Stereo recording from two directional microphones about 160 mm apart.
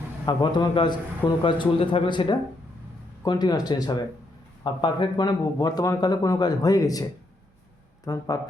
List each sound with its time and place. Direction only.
0.3 s a man's voice: 30° left (ahead or behind)
8.0 s a man's voice: 20° left (ahead or behind)